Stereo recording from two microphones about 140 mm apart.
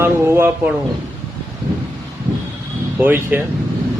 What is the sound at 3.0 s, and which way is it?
Speech, 15° right (ahead or behind).